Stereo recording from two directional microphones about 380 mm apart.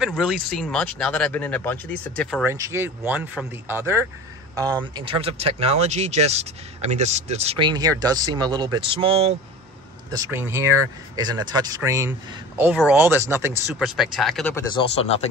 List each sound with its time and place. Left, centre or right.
0.0 s speech: centre
2.5 s speech: centre